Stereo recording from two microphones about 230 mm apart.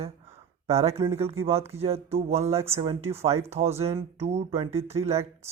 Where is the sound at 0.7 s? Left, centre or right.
Right.